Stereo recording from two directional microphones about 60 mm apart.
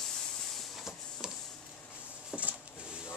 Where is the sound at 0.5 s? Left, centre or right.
Centre.